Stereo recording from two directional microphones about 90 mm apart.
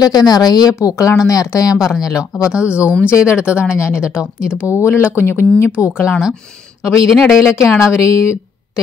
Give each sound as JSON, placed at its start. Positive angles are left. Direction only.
{"t": 0.0, "sound": "a woman's voice", "side_deg": 45}
{"t": 2.5, "sound": "speech", "side_deg": -15}
{"t": 3.1, "sound": "speech", "side_deg": 30}
{"t": 3.3, "sound": "speech", "side_deg": -15}
{"t": 3.7, "sound": "speech", "side_deg": 30}
{"t": 4.0, "sound": "speech", "side_deg": -10}
{"t": 4.4, "sound": "speech", "side_deg": 25}
{"t": 6.8, "sound": "speech", "side_deg": -5}
{"t": 7.8, "sound": "speech", "side_deg": 35}